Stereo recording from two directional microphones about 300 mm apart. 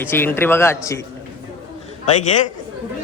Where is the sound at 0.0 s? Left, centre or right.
Centre.